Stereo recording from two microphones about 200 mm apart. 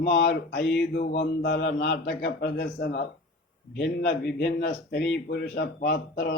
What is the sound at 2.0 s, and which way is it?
Mantra, 55° left (ahead or behind).